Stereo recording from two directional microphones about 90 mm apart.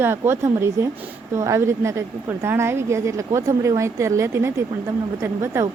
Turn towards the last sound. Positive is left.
turn(degrees=-30)  # may be behind; listen again after turning